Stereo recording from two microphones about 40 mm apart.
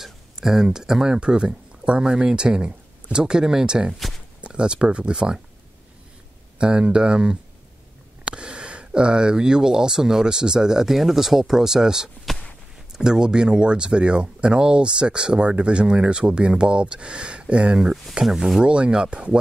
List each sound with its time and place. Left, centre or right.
0.0 s speech: centre
6.6 s speech: right
18.6 s speech: right